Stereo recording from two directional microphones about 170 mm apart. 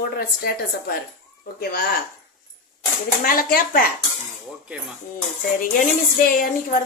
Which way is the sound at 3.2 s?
60° left (ahead or behind).